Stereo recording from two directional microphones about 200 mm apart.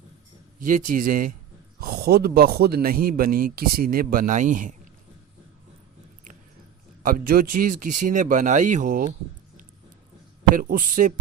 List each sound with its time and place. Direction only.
0.6 s a man's voice: 40° right (ahead or behind)
7.0 s speech: 45° right (ahead or behind)
10.5 s a man's voice: 45° right (ahead or behind)